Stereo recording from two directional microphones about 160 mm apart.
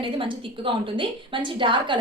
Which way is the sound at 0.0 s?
30° right (ahead or behind).